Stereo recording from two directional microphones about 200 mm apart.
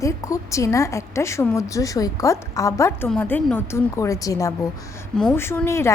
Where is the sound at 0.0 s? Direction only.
15° left (ahead or behind).